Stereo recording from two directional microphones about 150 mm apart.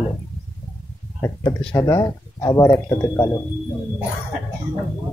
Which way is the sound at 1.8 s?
20° left (ahead or behind).